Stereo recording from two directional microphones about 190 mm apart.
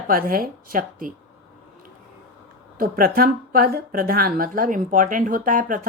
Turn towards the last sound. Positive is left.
turn(degrees=-45)  # may be behind; listen again after turning